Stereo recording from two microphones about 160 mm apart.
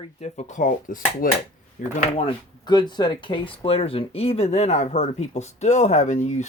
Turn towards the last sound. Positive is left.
turn(degrees=45)  # may be behind; listen again after turning